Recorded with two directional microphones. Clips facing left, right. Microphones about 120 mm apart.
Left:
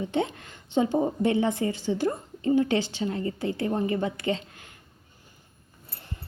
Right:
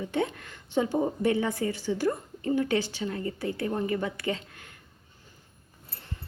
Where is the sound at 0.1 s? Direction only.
25° left (ahead or behind).